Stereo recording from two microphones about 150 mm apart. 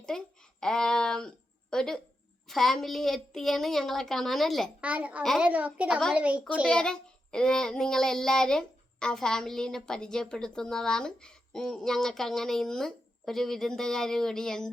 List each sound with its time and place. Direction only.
0.1 s child singing: centre (ahead or behind)
4.8 s a woman's voice: 10° right (ahead or behind)
6.7 s child singing: 5° left (ahead or behind)